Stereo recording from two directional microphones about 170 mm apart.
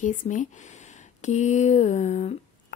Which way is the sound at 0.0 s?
50° left (ahead or behind).